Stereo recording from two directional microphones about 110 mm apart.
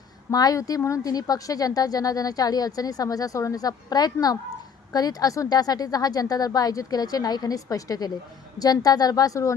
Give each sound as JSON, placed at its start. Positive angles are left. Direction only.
{"t": 0.3, "sound": "a woman's voice", "side_deg": 35}